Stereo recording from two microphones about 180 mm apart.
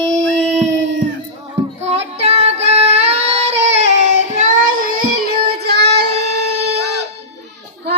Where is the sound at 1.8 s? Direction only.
35° right (ahead or behind); by 6.1 s 65° right (ahead or behind).